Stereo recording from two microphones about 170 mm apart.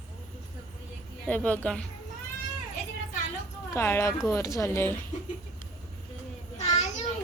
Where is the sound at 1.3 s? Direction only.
10° left (ahead or behind).